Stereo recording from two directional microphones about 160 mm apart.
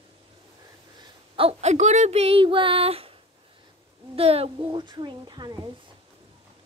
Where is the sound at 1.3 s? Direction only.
35° right (ahead or behind).